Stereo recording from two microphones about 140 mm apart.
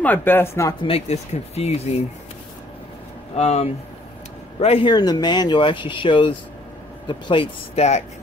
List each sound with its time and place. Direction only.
0.0 s speech: 15° left (ahead or behind)
0.8 s speech: 45° left (ahead or behind)
3.3 s speech: 50° left (ahead or behind)
4.9 s speech: 30° left (ahead or behind); by 8.0 s 50° left (ahead or behind)